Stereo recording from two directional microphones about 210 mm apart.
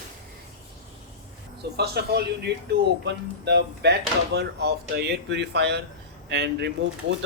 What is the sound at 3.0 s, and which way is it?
Speech, 55° right (ahead or behind).